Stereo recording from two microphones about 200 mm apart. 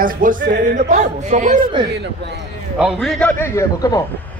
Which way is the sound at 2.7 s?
Centre (ahead or behind).